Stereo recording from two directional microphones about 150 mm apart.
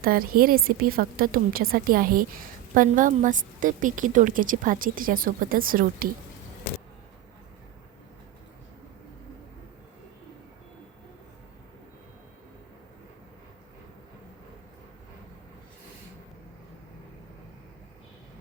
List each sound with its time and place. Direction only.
0.0 s a woman's voice: 75° right (ahead or behind)
2.7 s a woman's voice: 60° right (ahead or behind)